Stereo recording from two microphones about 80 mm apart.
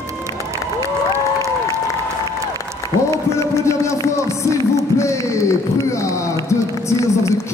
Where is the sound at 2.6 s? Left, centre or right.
Left.